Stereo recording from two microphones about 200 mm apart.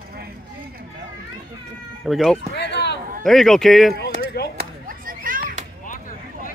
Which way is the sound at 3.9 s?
50° left (ahead or behind).